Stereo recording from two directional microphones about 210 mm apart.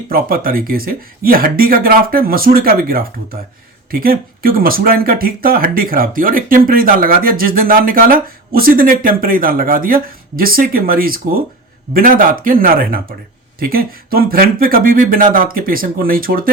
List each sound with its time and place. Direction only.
0.1 s speech: 45° right (ahead or behind)